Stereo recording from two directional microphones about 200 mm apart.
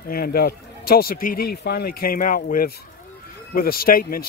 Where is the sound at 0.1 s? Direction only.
50° left (ahead or behind).